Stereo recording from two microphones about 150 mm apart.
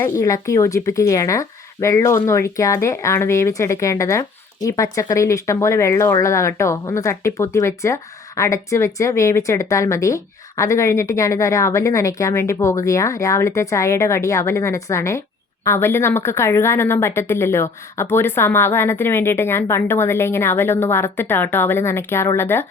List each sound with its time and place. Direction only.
0.0 s a woman's voice: 20° left (ahead or behind)